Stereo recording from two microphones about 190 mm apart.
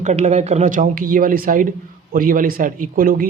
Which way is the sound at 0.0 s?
35° right (ahead or behind).